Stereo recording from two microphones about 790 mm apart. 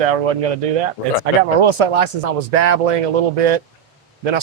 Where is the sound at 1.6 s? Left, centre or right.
Right.